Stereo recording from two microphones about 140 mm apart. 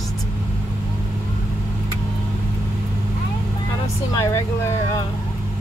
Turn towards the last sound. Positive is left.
turn(degrees=25)  # may be behind; listen again after turning